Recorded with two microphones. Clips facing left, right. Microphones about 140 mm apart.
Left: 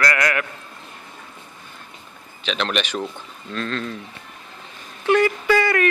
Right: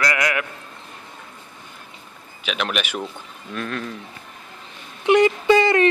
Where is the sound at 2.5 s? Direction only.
5° right (ahead or behind).